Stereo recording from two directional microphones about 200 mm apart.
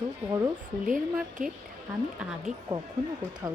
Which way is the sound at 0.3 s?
20° right (ahead or behind).